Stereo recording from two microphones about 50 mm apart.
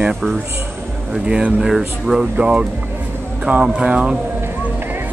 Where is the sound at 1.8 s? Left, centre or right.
Centre.